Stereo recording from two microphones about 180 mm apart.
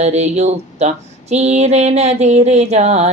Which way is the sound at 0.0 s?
40° right (ahead or behind).